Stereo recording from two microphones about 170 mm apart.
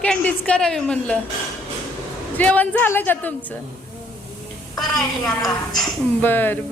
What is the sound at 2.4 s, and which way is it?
A woman's voice, 10° left (ahead or behind).